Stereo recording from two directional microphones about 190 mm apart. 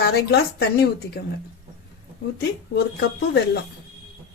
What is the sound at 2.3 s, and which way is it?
Speech, 55° left (ahead or behind).